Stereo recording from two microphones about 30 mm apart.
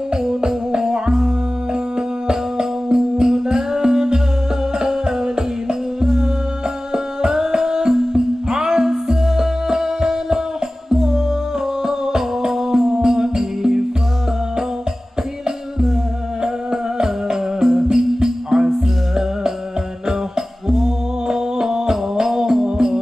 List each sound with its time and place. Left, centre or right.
0.1 s music: centre
1.7 s music: right
3.0 s music: centre
3.4 s music: right
16.4 s music: centre